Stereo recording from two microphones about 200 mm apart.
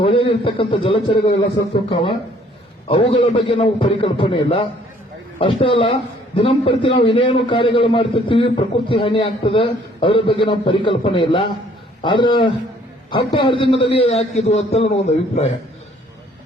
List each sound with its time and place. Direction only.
0.0 s a man's voice: 30° left (ahead or behind)